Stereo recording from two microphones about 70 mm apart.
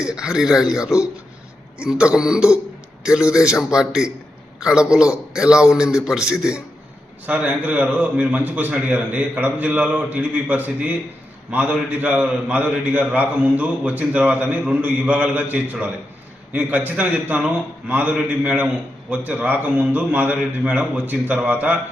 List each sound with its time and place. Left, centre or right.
0.0 s a man's voice: centre